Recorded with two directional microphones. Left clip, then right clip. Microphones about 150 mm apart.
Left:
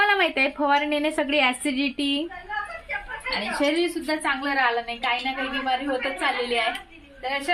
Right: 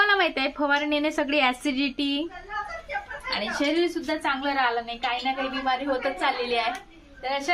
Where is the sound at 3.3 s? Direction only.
Centre (ahead or behind).